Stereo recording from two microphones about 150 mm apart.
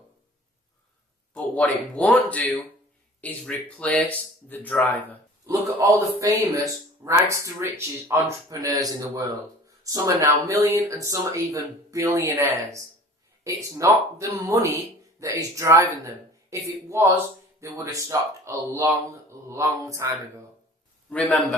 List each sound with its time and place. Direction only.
1.3 s speech: 10° left (ahead or behind)
5.5 s speech: 20° right (ahead or behind)
21.1 s a man's voice: 10° left (ahead or behind)